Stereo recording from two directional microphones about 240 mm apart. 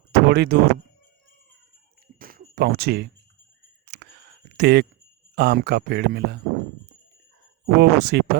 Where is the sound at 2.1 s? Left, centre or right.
Right.